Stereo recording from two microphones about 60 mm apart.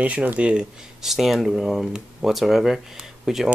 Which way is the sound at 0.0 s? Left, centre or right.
Right.